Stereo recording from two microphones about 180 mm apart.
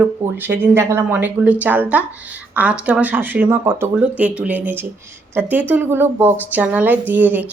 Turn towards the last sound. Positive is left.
turn(degrees=-10)  # may be behind; listen again after turning